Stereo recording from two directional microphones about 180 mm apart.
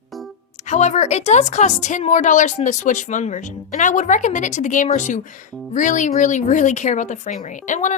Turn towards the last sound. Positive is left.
turn(degrees=45)  # may be behind; listen again after turning